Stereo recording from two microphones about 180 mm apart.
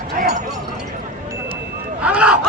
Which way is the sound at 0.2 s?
50° right (ahead or behind).